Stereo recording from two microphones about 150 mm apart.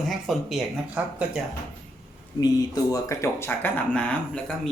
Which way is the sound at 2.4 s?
25° left (ahead or behind).